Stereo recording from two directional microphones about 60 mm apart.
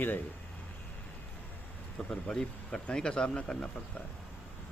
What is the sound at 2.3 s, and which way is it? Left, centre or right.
Speech, centre.